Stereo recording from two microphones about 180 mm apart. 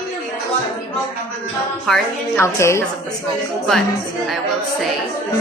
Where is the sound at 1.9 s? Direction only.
Centre (ahead or behind).